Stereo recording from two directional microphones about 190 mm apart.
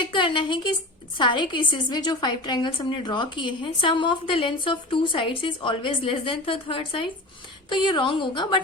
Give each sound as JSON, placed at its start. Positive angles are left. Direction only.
{"t": 0.0, "sound": "a woman's voice", "side_deg": 25}